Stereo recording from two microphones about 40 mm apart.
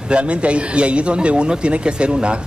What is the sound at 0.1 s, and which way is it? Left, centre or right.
Speech, right.